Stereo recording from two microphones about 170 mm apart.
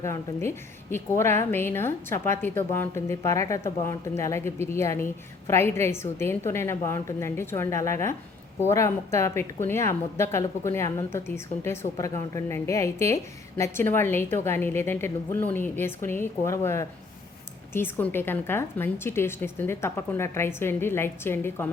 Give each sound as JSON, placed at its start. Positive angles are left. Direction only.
{"t": 0.0, "sound": "a woman's voice", "side_deg": 15}